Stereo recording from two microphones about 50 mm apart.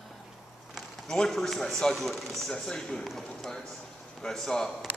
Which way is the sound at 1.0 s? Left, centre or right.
Centre.